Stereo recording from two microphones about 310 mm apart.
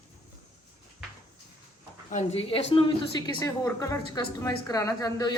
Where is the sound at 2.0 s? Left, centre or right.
Left.